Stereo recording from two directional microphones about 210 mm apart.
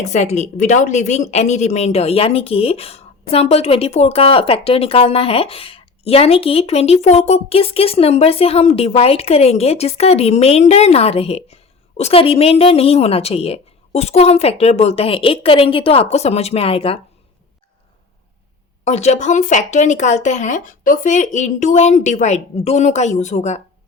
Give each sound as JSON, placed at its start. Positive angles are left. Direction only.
{"t": 0.0, "sound": "a woman's voice", "side_deg": 35}
{"t": 18.9, "sound": "speech", "side_deg": 30}